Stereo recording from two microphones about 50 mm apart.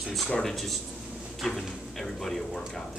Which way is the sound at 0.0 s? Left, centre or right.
Centre.